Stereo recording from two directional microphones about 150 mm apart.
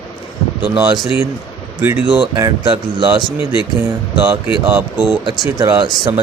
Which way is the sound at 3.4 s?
35° left (ahead or behind).